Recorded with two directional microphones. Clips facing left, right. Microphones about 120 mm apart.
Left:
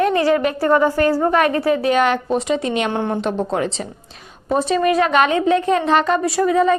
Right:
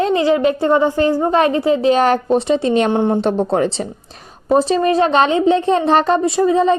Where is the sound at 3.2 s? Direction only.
35° right (ahead or behind).